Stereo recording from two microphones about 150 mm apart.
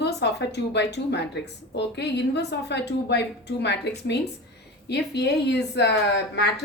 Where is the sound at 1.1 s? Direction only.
90° left.